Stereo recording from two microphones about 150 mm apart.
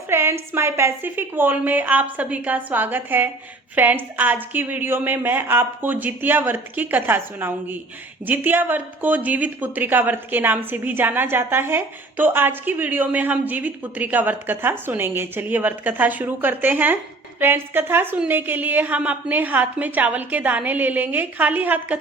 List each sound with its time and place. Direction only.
0.1 s a woman's voice: 15° right (ahead or behind)